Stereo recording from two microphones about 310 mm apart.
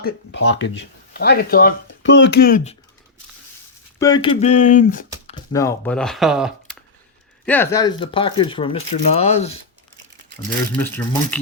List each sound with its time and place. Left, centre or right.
0.3 s speech: left
3.9 s speech: centre
5.5 s speech: centre
10.8 s speech: centre